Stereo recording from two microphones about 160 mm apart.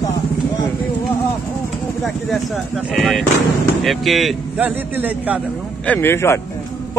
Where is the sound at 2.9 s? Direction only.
Centre (ahead or behind).